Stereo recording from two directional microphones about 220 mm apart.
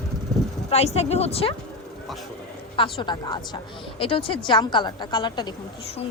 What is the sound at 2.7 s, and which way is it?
A woman's voice, 25° left (ahead or behind).